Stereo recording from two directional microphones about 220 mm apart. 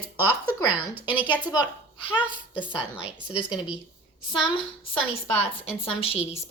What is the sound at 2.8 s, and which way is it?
Speech, 5° right (ahead or behind).